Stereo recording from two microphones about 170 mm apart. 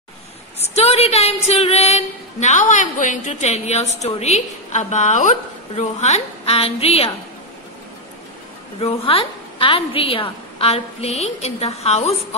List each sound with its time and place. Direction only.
0.7 s a woman's voice: 40° left (ahead or behind)
8.7 s a woman's voice: 35° left (ahead or behind)